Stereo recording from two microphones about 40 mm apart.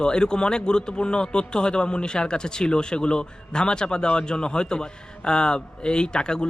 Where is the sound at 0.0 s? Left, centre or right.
Left.